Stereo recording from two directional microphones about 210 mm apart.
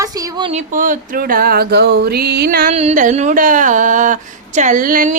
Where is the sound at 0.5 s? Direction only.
40° right (ahead or behind).